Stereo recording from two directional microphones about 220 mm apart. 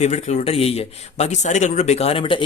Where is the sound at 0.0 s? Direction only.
30° left (ahead or behind).